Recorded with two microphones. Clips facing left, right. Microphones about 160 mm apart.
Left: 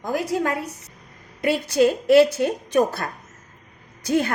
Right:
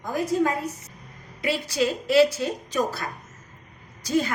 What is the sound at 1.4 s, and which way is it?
A woman's voice, 55° left (ahead or behind).